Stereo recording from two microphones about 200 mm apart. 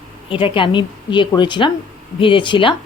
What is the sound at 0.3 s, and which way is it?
Speech, 25° left (ahead or behind).